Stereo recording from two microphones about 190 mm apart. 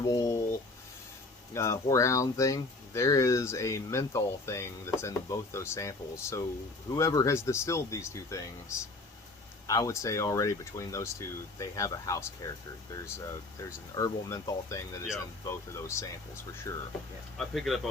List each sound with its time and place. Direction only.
0.0 s speech: 15° left (ahead or behind)
1.5 s speech: 15° left (ahead or behind)
9.6 s speech: 15° left (ahead or behind)
13.9 s speech: 15° left (ahead or behind)
17.3 s speech: centre (ahead or behind)